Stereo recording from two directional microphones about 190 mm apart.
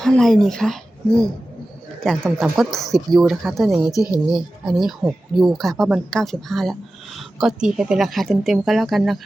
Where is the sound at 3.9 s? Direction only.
20° left (ahead or behind).